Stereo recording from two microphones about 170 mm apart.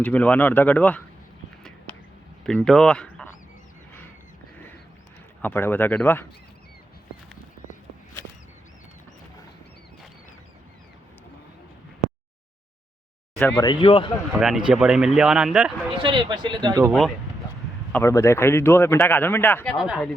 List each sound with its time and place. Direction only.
0.0 s speech: 10° left (ahead or behind)
2.5 s speech: 5° left (ahead or behind)
5.4 s speech: 10° left (ahead or behind)
13.6 s speech: 30° left (ahead or behind)
14.3 s speech: centre (ahead or behind)
16.0 s speech: 30° right (ahead or behind)
17.9 s speech: 15° left (ahead or behind)
19.7 s speech: centre (ahead or behind)